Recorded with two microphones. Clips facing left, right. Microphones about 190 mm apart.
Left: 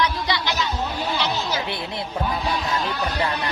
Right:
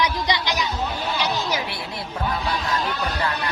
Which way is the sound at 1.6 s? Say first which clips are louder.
Left 3 dB; 20° left (ahead or behind).